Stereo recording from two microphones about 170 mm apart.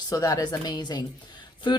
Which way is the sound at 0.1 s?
20° left (ahead or behind).